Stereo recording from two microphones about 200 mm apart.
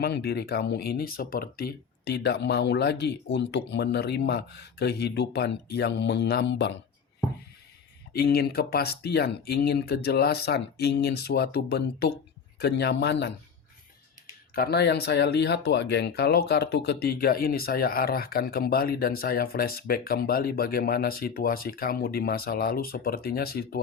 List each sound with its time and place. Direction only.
0.0 s speech: 55° left (ahead or behind)
8.1 s speech: 50° left (ahead or behind)
14.5 s speech: 50° left (ahead or behind)